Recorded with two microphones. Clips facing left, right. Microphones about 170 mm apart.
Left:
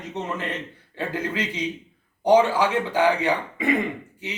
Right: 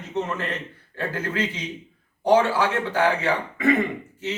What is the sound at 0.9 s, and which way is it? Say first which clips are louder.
Speech: even; 15° left (ahead or behind).